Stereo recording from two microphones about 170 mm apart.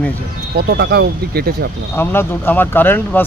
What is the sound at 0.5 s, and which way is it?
Speech, 75° right (ahead or behind).